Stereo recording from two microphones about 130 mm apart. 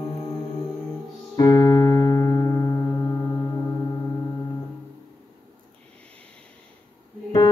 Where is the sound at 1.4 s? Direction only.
25° left (ahead or behind).